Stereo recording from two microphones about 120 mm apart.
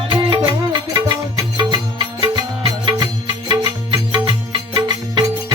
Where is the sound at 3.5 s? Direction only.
35° right (ahead or behind).